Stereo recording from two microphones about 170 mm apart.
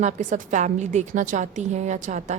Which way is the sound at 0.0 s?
50° right (ahead or behind).